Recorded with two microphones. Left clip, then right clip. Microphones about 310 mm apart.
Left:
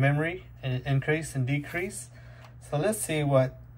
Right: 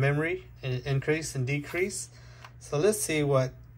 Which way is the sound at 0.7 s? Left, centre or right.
Centre.